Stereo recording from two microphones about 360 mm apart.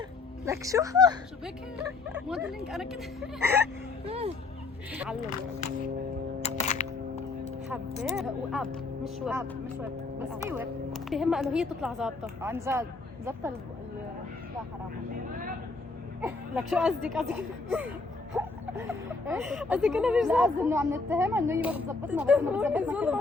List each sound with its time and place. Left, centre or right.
0.4 s speech: centre
4.0 s speech: centre
6.4 s music: centre
8.1 s speech: centre
16.2 s speech: centre